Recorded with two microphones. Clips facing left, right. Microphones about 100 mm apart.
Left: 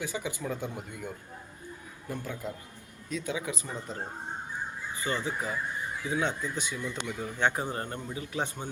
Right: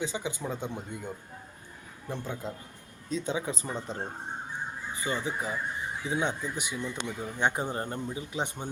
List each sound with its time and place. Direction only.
0.0 s speech: 20° right (ahead or behind)
4.9 s speech: 15° right (ahead or behind)